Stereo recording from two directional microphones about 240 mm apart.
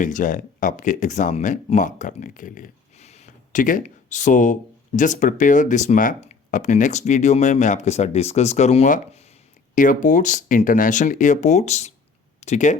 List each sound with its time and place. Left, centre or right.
0.0 s speech: left